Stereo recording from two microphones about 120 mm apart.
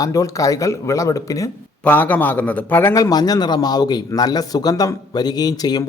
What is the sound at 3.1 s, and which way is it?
A man's voice, 35° left (ahead or behind).